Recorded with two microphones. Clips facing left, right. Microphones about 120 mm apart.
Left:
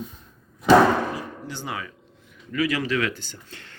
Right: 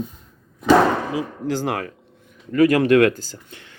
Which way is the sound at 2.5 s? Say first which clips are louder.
Right 10 dB; 50° right (ahead or behind).